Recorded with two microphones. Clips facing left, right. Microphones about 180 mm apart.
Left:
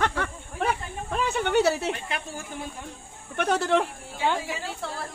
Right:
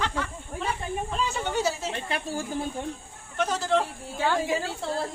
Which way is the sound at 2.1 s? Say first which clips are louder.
Right 4 dB; 35° right (ahead or behind).